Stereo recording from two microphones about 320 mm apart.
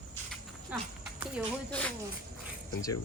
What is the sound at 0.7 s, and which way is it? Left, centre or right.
Speech, centre.